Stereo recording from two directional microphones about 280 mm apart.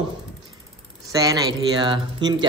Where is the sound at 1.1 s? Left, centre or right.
Centre.